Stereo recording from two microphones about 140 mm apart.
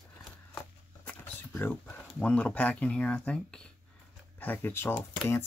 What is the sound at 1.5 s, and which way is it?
Speech, 15° left (ahead or behind).